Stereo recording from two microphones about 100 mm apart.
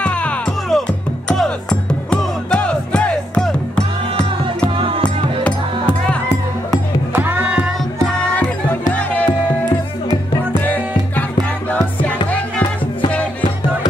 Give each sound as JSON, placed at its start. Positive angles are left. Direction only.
{"t": 0.0, "sound": "music", "side_deg": 15}
{"t": 4.6, "sound": "music", "side_deg": -65}
{"t": 5.4, "sound": "music", "side_deg": 10}
{"t": 7.2, "sound": "music", "side_deg": -20}
{"t": 8.3, "sound": "music", "side_deg": 15}